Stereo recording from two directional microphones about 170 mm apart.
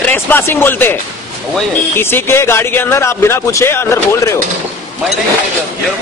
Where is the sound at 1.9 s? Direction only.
15° left (ahead or behind).